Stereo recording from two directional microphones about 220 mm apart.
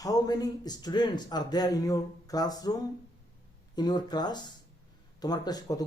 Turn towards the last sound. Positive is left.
turn(degrees=20)  # may be behind; listen again after turning